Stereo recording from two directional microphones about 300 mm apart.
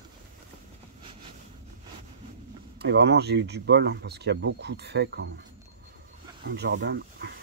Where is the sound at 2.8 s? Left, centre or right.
Right.